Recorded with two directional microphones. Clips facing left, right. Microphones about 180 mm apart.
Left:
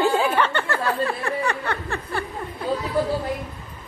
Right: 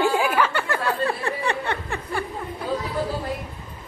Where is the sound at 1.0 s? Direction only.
30° right (ahead or behind).